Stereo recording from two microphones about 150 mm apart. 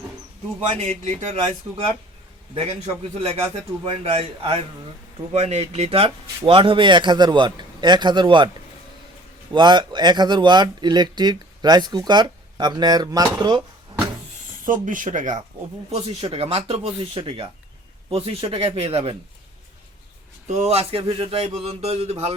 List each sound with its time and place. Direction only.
0.8 s a sound: 45° right (ahead or behind)
2.6 s speech: 40° right (ahead or behind)
9.5 s speech: 30° right (ahead or behind)
14.6 s speech: 65° right (ahead or behind)
15.9 s speech: 40° right (ahead or behind)
20.5 s a sound: 45° right (ahead or behind)